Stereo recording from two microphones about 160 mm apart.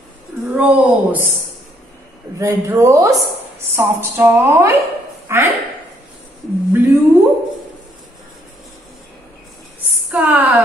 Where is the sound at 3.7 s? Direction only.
15° right (ahead or behind).